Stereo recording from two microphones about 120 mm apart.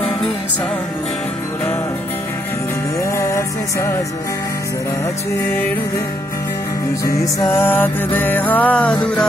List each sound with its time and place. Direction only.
3.0 s music: 25° left (ahead or behind)
7.1 s music: 30° left (ahead or behind)
7.4 s music: 20° left (ahead or behind)